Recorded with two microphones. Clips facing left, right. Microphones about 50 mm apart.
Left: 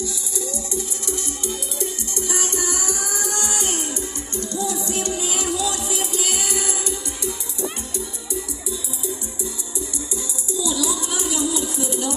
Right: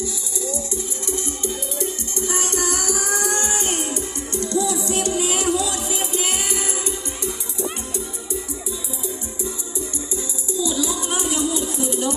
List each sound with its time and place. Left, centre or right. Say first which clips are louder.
2.6 s music: right 2 dB; right
3.3 s music: right 2 dB; right
10.2 s music: right 3 dB; centre
11.1 s music: right 1 dB; right